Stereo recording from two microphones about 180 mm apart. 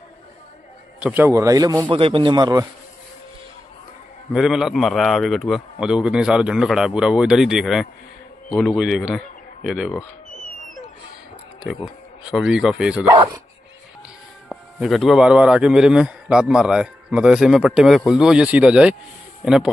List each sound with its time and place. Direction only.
0.9 s speech: 10° right (ahead or behind)
4.3 s a man's voice: 5° right (ahead or behind)
11.6 s speech: 5° right (ahead or behind)
14.5 s a man's voice: centre (ahead or behind)